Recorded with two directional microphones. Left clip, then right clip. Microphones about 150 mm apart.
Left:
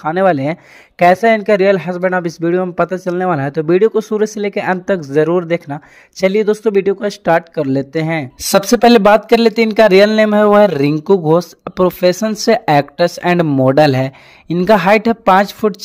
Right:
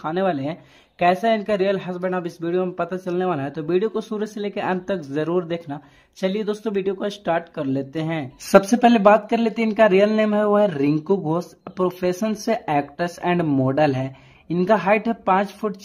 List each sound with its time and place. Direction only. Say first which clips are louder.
0.0 s speech: left 10 dB; 40° left (ahead or behind)